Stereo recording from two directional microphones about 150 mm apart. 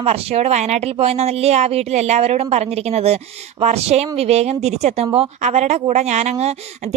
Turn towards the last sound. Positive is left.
turn(degrees=-45)  # may be behind; listen again after turning